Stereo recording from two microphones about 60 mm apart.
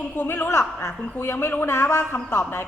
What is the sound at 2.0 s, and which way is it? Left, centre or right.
Speech, left.